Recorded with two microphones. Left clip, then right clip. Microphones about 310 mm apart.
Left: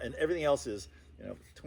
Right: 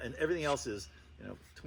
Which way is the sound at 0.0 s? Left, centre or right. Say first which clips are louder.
Left 2 dB; left.